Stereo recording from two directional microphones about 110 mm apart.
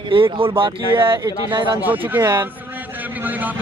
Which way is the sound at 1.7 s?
15° right (ahead or behind).